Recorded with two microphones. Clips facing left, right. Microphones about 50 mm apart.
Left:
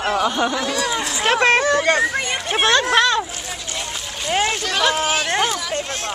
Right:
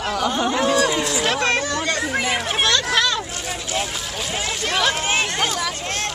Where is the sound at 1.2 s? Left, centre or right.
Left.